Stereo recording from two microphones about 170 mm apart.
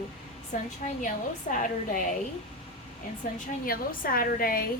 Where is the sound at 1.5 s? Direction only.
50° left (ahead or behind).